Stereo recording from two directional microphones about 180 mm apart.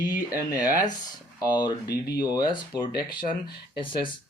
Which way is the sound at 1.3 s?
25° left (ahead or behind).